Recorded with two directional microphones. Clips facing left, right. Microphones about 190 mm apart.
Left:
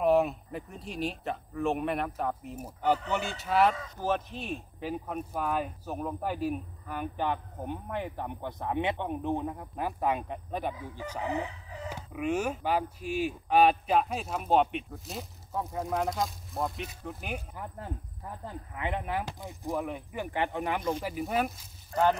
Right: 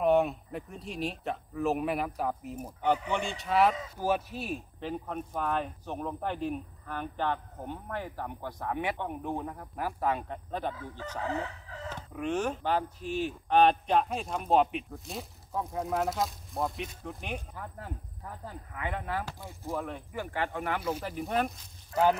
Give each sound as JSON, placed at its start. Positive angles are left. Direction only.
{"t": 0.0, "sound": "speech", "side_deg": 0}
{"t": 4.7, "sound": "speech", "side_deg": 10}
{"t": 18.4, "sound": "speech", "side_deg": 20}
{"t": 21.0, "sound": "speech", "side_deg": 5}